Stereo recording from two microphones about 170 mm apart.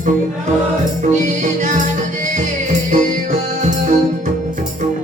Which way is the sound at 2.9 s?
50° right (ahead or behind).